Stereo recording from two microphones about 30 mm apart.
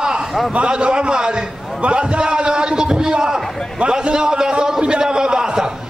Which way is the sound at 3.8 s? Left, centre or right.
Right.